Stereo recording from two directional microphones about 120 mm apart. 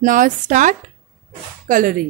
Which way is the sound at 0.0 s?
90° right.